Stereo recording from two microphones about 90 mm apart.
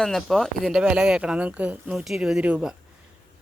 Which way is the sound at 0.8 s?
10° right (ahead or behind).